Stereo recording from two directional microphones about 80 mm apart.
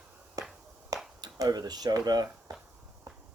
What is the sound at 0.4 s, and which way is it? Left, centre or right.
Finger snapping, right.